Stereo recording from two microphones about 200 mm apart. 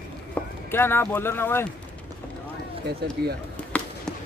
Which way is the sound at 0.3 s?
10° left (ahead or behind).